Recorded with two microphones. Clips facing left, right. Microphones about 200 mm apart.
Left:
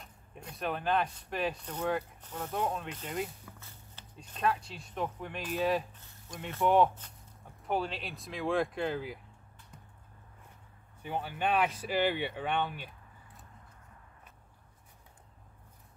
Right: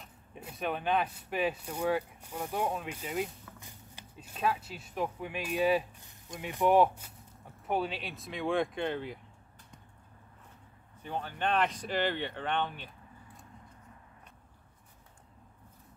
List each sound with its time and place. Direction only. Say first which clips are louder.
0.0 s speech: right 1 dB; 5° right (ahead or behind)
11.0 s speech: left 1 dB; 10° left (ahead or behind)